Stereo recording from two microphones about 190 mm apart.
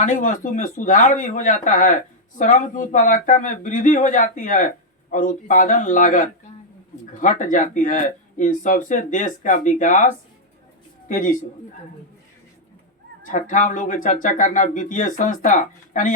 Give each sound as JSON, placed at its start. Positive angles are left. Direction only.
{"t": 0.0, "sound": "speech", "side_deg": 45}
{"t": 13.2, "sound": "speech", "side_deg": 45}